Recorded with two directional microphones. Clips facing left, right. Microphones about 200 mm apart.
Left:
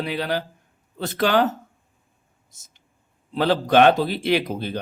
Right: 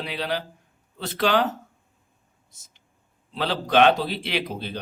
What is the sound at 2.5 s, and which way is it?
A man's voice, 45° left (ahead or behind).